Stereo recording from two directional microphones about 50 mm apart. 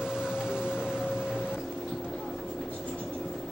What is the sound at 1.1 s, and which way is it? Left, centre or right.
Music, centre.